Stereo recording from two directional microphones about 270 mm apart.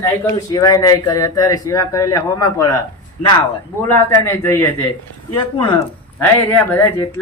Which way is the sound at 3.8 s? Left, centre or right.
Centre.